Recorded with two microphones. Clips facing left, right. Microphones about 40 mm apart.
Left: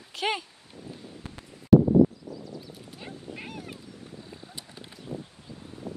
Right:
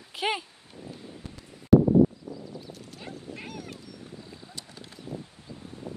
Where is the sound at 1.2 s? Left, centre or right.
Left.